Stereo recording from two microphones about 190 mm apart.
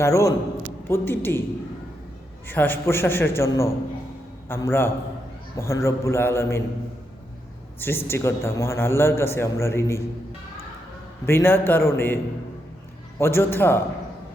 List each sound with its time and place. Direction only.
0.0 s a man's voice: 15° left (ahead or behind)
2.5 s a man's voice: 10° left (ahead or behind)
7.8 s a man's voice: 10° left (ahead or behind)
11.3 s a man's voice: 10° left (ahead or behind)